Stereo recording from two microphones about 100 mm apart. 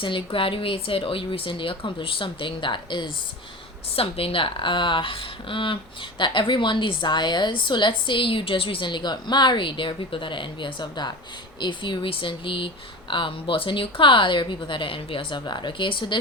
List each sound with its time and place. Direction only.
0.0 s speech: 55° left (ahead or behind)
3.9 s a woman's voice: 70° left (ahead or behind); by 16.1 s 55° left (ahead or behind)